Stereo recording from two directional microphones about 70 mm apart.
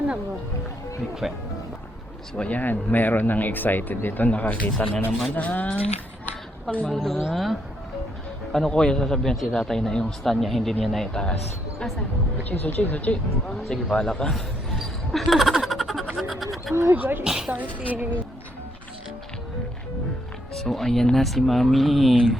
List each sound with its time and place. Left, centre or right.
2.3 s speech: centre
6.9 s speech: centre
8.5 s a man's voice: centre
12.4 s speech: left
13.9 s a man's voice: centre
14.8 s a sound: centre
16.9 s speech: right
17.2 s a woman's voice: centre
17.5 s speech: right
20.5 s speech: centre